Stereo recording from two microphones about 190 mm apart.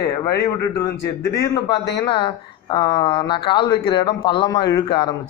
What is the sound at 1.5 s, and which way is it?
Speech, 20° left (ahead or behind).